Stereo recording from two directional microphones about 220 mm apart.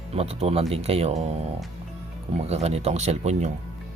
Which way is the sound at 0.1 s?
30° right (ahead or behind).